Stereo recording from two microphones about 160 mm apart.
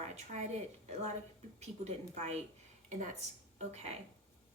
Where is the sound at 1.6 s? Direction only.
45° right (ahead or behind).